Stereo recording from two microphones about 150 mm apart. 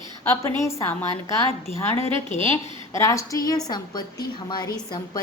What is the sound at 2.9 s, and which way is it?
A woman's voice, 20° left (ahead or behind).